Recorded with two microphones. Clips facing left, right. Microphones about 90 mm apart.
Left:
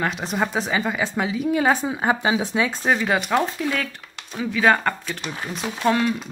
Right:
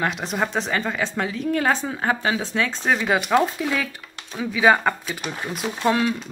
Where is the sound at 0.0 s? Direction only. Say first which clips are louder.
Even; centre (ahead or behind).